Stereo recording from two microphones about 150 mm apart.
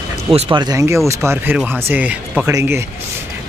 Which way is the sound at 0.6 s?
25° right (ahead or behind).